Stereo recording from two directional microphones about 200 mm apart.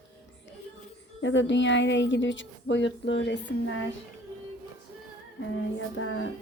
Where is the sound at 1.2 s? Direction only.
65° left (ahead or behind).